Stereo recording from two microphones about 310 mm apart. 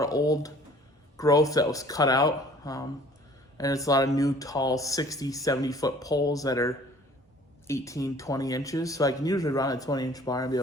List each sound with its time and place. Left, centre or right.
0.0 s speech: centre